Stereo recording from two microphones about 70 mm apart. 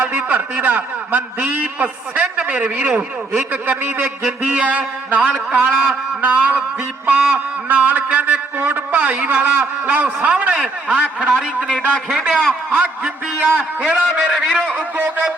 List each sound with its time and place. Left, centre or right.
0.0 s a man's voice: right
12.7 s a man's voice: right